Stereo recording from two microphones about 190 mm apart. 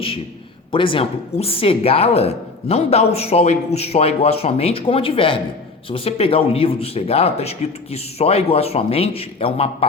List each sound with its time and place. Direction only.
0.7 s a woman's voice: 25° left (ahead or behind)